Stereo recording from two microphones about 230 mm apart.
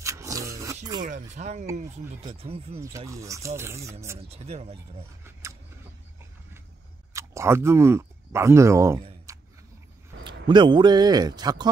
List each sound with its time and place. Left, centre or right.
0.0 s zipper: centre
1.0 s speech: right
3.1 s speech: centre
4.2 s speech: right
7.2 s speech: centre
9.3 s a sound: centre
10.5 s speech: centre